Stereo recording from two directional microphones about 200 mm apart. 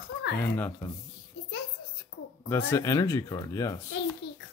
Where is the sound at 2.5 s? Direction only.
10° left (ahead or behind).